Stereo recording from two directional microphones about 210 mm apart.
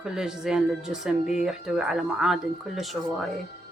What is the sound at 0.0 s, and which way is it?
Speech, 5° right (ahead or behind).